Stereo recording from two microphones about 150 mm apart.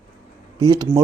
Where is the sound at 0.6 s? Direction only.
25° right (ahead or behind).